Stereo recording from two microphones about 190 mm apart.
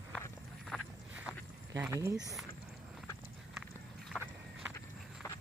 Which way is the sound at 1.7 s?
15° right (ahead or behind).